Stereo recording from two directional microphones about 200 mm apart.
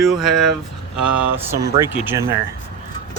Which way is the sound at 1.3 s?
15° right (ahead or behind).